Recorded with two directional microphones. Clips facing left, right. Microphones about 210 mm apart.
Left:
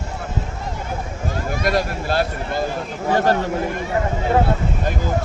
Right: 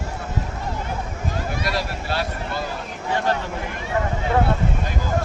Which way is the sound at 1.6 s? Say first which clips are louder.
Left 6 dB; 45° left (ahead or behind).